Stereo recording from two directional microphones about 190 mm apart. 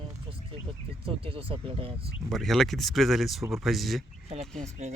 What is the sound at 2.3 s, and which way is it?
Speech, centre (ahead or behind).